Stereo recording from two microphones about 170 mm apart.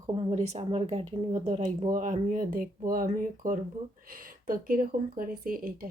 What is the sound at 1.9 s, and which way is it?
Speech, 50° right (ahead or behind).